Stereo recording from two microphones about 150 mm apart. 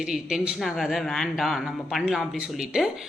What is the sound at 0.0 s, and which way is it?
A woman's voice, 5° right (ahead or behind).